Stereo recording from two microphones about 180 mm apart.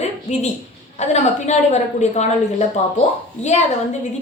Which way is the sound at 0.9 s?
40° left (ahead or behind).